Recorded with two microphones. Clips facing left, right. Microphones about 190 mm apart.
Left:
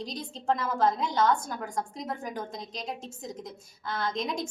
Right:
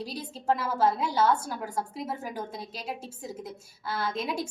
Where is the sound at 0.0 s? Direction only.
5° right (ahead or behind).